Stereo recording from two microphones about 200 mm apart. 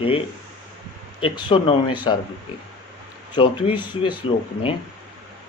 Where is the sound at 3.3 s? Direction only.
25° left (ahead or behind).